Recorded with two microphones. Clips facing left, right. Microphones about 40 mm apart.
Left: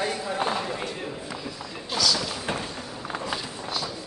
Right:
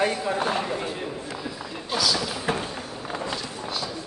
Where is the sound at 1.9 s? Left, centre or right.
Centre.